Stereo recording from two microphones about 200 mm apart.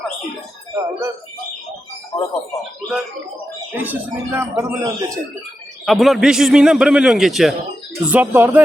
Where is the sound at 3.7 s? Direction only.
10° right (ahead or behind).